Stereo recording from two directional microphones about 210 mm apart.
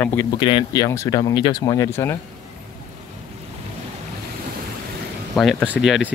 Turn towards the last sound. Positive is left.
turn(degrees=0)  # may be behind; listen again after turning